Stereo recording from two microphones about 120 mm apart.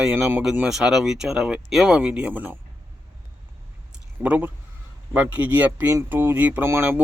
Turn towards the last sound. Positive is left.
turn(degrees=-20)  # may be behind; listen again after turning